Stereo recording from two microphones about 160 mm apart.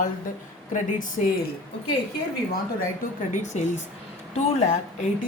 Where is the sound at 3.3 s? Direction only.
45° left (ahead or behind).